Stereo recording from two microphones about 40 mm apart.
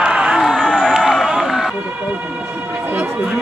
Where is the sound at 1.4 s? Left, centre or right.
Centre.